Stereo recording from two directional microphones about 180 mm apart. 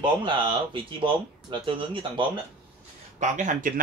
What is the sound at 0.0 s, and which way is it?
Speech, 25° right (ahead or behind).